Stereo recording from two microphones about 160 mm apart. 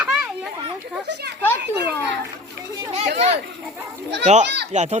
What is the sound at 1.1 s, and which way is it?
Speech, 90° right.